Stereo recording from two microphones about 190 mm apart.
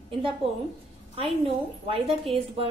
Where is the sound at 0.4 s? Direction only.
30° right (ahead or behind).